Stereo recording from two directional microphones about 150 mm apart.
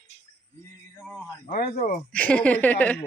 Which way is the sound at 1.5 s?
70° left (ahead or behind).